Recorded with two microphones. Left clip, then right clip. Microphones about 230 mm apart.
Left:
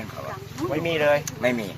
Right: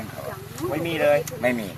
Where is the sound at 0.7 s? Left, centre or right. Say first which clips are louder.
Left 2 dB; left.